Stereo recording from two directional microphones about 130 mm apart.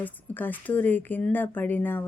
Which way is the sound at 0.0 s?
15° left (ahead or behind).